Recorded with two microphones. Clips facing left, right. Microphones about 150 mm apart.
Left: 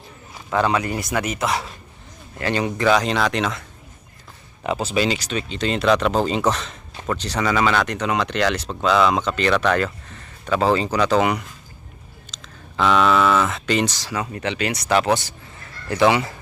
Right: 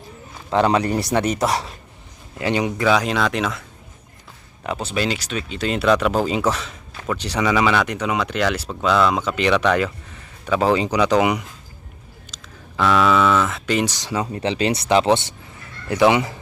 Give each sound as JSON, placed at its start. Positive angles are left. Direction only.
{"t": 0.5, "sound": "a man's voice", "side_deg": -25}
{"t": 2.4, "sound": "speech", "side_deg": -15}
{"t": 2.8, "sound": "speech", "side_deg": -5}
{"t": 4.6, "sound": "speech", "side_deg": 5}
{"t": 9.3, "sound": "speech", "side_deg": -15}
{"t": 9.7, "sound": "a sound", "side_deg": -10}
{"t": 10.8, "sound": "speech", "side_deg": -15}
{"t": 12.3, "sound": "a sound", "side_deg": 0}
{"t": 12.7, "sound": "speech", "side_deg": -5}